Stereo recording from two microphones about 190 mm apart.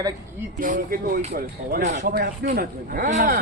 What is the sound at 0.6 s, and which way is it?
A woman's voice, 45° right (ahead or behind).